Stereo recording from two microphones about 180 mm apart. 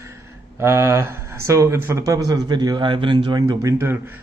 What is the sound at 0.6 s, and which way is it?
Speech, 15° right (ahead or behind).